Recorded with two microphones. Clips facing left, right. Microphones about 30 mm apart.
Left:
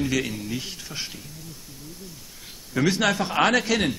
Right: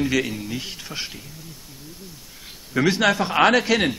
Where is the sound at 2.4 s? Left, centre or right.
Centre.